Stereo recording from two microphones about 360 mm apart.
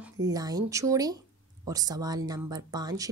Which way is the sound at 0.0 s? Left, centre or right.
Centre.